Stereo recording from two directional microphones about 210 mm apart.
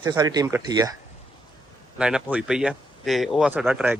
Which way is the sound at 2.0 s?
5° right (ahead or behind).